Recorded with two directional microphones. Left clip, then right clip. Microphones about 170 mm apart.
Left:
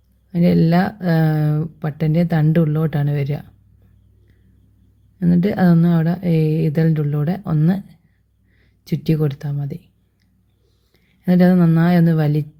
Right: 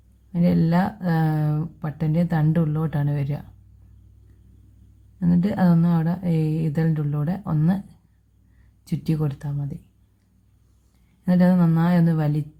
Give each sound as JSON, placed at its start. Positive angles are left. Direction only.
{"t": 0.3, "sound": "speech", "side_deg": 15}
{"t": 5.2, "sound": "speech", "side_deg": 15}
{"t": 8.8, "sound": "speech", "side_deg": 15}
{"t": 11.3, "sound": "speech", "side_deg": 20}